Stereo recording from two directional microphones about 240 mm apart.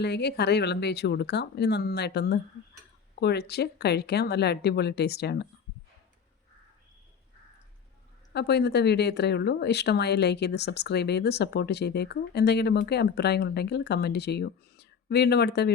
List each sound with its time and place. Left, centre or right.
0.0 s speech: left
8.3 s speech: left